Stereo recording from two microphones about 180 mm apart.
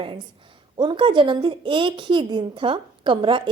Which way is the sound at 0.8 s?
25° right (ahead or behind).